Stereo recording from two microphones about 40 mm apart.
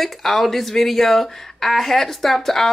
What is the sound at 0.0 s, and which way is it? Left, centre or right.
Speech, centre.